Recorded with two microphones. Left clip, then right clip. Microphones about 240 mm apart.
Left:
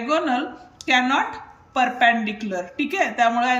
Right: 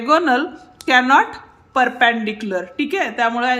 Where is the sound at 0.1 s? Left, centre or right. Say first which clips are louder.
Right 7 dB; centre.